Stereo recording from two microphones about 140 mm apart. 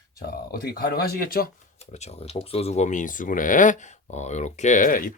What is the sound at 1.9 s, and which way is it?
Speech, 50° left (ahead or behind).